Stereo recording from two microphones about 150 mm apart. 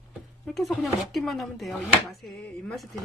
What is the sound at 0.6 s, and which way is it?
Speech, centre (ahead or behind).